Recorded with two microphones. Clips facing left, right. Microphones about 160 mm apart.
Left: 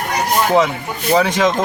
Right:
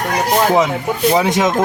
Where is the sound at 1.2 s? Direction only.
20° right (ahead or behind).